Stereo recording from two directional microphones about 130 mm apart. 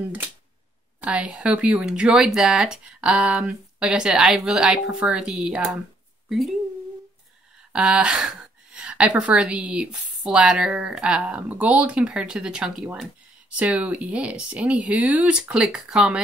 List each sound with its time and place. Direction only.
1.0 s a woman's voice: 10° right (ahead or behind)
7.7 s a woman's voice: 5° right (ahead or behind)